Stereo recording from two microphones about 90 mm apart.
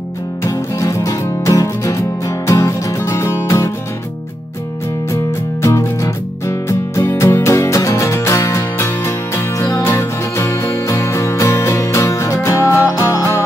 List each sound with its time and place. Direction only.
0.4 s music: 35° left (ahead or behind)
5.1 s music: 35° left (ahead or behind)